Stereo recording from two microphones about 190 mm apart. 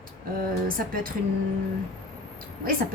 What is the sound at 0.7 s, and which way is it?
Speech, 50° right (ahead or behind).